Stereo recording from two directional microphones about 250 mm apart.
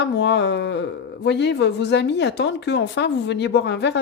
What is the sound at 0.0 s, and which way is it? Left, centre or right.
Speech, left.